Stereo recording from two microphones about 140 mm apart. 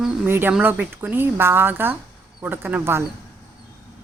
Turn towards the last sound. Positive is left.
turn(degrees=-15)  # may be behind; listen again after turning